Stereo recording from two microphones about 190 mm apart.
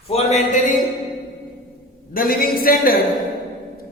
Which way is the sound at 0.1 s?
35° left (ahead or behind).